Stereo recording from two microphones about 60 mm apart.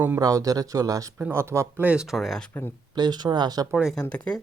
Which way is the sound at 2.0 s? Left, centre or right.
Centre.